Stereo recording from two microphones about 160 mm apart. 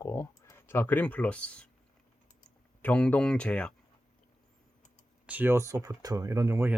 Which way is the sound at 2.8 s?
10° left (ahead or behind).